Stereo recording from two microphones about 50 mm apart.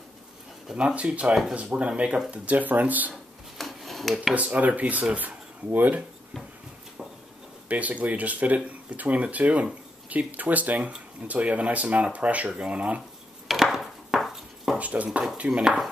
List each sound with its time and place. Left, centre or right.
0.7 s speech: right
3.5 s rub: centre
4.3 s speech: right
7.6 s speech: right
13.5 s a sound: centre
14.8 s speech: right